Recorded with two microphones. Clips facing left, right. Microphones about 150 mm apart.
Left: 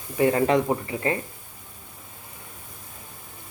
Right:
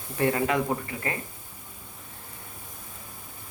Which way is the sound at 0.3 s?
30° left (ahead or behind).